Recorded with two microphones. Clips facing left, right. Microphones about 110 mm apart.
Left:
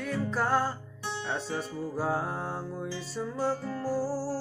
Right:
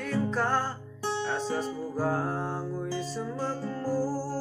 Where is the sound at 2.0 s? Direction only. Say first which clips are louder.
Right 2 dB; 5° left (ahead or behind).